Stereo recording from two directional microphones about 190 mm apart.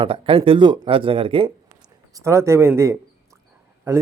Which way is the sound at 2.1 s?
15° right (ahead or behind).